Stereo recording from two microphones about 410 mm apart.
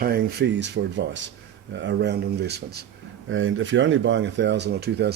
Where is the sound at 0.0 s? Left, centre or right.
Right.